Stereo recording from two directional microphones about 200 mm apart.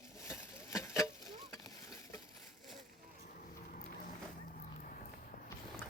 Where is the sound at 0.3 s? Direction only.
15° left (ahead or behind).